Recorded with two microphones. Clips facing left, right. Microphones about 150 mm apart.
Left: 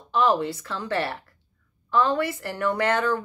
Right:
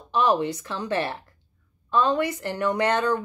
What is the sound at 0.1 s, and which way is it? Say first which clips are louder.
Speech: even; 15° right (ahead or behind).